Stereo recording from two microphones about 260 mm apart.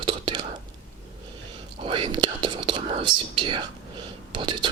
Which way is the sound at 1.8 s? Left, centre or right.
Centre.